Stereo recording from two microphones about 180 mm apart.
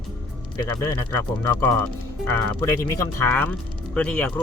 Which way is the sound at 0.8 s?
15° left (ahead or behind).